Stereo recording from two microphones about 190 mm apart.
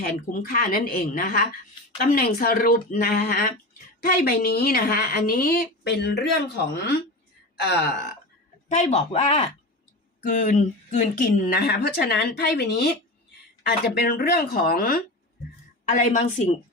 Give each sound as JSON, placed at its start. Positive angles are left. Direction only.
{"t": 0.0, "sound": "a woman's voice", "side_deg": 50}
{"t": 7.5, "sound": "speech", "side_deg": 70}
{"t": 8.7, "sound": "a woman's voice", "side_deg": 35}
{"t": 15.9, "sound": "speech", "side_deg": 40}